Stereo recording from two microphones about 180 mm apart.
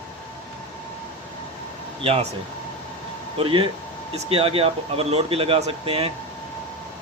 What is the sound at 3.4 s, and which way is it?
Speech, 30° right (ahead or behind).